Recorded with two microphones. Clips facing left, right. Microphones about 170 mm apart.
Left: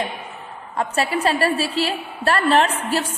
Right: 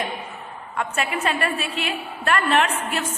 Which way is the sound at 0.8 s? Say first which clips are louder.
Left 4 dB; 35° left (ahead or behind).